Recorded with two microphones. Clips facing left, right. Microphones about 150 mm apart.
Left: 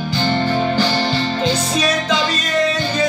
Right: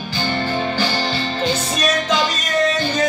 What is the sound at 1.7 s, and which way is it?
Music, 10° right (ahead or behind).